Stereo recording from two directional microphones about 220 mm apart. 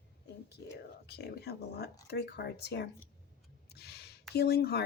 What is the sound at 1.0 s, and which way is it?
A woman's voice, 45° left (ahead or behind).